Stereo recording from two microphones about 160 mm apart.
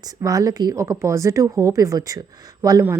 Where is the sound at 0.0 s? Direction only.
25° right (ahead or behind).